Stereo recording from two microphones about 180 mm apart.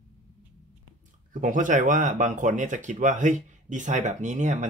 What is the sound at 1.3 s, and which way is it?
A man's voice, 45° right (ahead or behind).